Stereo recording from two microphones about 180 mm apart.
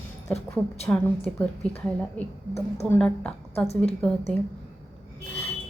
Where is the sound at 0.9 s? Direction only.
5° left (ahead or behind).